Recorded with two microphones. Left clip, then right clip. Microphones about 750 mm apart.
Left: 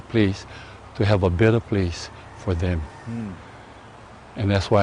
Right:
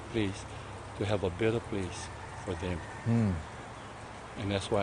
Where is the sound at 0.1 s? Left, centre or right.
Left.